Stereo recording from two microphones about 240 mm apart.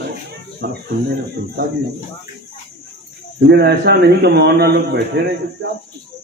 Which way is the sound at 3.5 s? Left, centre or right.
Right.